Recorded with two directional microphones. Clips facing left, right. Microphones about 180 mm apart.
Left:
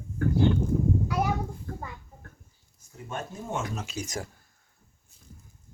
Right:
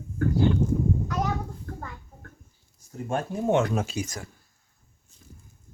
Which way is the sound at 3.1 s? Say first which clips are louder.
Right 10 dB; 55° right (ahead or behind).